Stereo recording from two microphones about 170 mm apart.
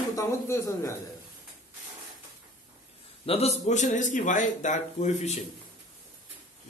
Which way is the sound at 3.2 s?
35° left (ahead or behind).